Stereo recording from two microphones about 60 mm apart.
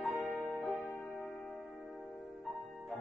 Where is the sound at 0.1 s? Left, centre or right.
Right.